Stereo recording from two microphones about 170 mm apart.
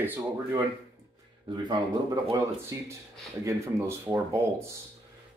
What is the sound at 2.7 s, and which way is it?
A woman's voice, 20° right (ahead or behind).